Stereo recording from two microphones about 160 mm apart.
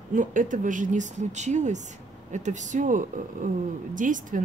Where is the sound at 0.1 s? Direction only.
55° right (ahead or behind).